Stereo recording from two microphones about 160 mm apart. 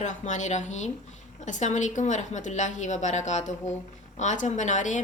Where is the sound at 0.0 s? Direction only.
50° left (ahead or behind).